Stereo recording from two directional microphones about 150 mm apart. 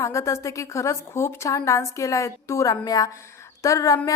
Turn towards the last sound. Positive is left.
turn(degrees=20)  # may be behind; listen again after turning